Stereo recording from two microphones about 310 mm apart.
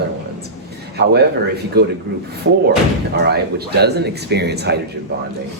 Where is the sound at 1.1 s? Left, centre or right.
Right.